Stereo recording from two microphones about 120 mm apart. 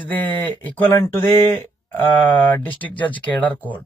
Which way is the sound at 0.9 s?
20° left (ahead or behind).